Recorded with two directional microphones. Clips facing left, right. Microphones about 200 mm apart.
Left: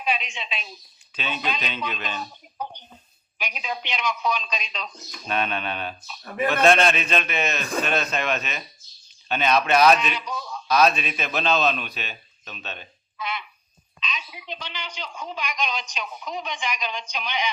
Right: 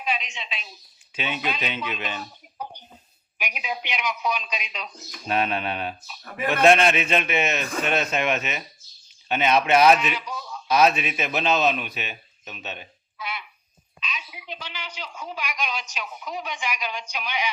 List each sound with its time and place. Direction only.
1.1 s speech: 15° right (ahead or behind)
3.3 s speech: 10° right (ahead or behind)
5.3 s a man's voice: 30° right (ahead or behind)
6.3 s speech: 15° right (ahead or behind)
7.1 s a man's voice: 20° right (ahead or behind)
10.0 s speech: 5° right (ahead or behind)
10.7 s a man's voice: 20° right (ahead or behind)